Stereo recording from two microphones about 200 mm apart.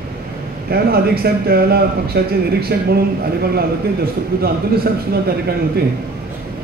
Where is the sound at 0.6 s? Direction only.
50° right (ahead or behind).